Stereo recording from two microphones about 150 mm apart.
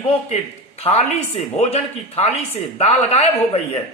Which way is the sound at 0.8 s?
45° left (ahead or behind).